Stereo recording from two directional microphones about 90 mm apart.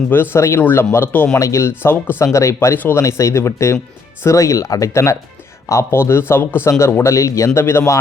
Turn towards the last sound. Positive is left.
turn(degrees=30)  # may be behind; listen again after turning